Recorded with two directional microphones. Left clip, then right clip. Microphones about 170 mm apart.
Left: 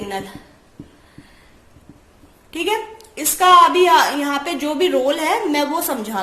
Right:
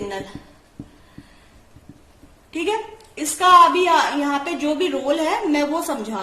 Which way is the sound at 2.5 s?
35° left (ahead or behind).